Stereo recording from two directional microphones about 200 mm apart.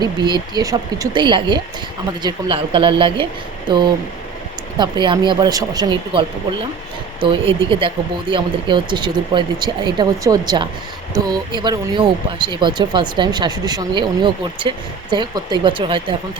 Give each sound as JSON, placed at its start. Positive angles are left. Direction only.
{"t": 0.0, "sound": "speech", "side_deg": -20}